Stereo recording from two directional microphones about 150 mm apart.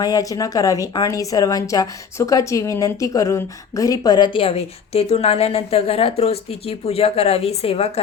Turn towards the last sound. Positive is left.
turn(degrees=40)  # may be behind; listen again after turning